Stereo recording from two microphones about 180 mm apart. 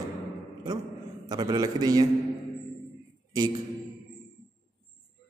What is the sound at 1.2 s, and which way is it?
Speech, 25° right (ahead or behind).